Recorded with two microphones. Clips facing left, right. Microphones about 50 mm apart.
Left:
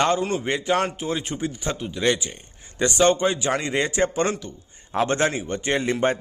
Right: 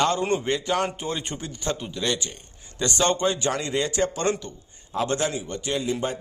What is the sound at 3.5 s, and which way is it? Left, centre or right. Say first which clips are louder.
Speech: left 2 dB; left.